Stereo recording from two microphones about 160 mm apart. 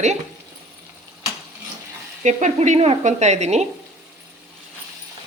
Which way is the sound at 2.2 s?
50° right (ahead or behind).